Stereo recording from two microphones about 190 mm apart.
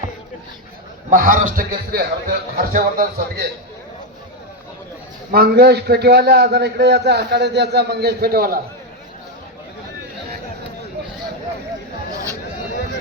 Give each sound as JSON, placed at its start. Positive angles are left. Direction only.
{"t": 1.1, "sound": "a man's voice", "side_deg": -45}
{"t": 5.3, "sound": "a man's voice", "side_deg": -55}